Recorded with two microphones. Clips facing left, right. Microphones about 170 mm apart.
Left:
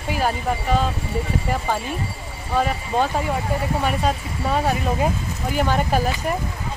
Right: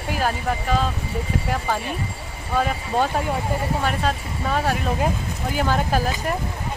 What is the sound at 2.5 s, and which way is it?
Speech, centre (ahead or behind).